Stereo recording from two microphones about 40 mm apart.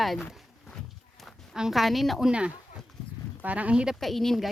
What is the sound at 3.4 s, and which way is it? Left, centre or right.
Speech, right.